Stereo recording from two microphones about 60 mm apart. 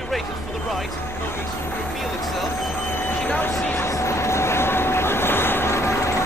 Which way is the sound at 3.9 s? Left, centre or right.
Left.